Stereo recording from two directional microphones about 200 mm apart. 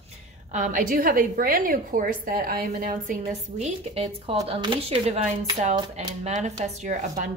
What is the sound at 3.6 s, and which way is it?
A woman's voice, 30° right (ahead or behind).